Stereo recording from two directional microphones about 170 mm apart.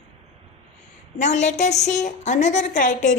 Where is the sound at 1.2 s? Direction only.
45° left (ahead or behind).